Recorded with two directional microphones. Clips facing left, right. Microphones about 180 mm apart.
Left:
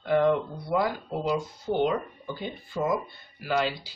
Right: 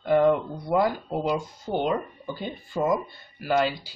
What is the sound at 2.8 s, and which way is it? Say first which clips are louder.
Speech: right 3 dB; 50° right (ahead or behind).